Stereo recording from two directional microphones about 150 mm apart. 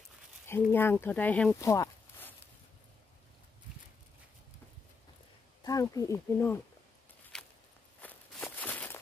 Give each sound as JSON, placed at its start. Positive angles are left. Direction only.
{"t": 0.5, "sound": "speech", "side_deg": 15}
{"t": 1.6, "sound": "a sound", "side_deg": 20}
{"t": 5.6, "sound": "speech", "side_deg": 25}
{"t": 7.3, "sound": "walk", "side_deg": 5}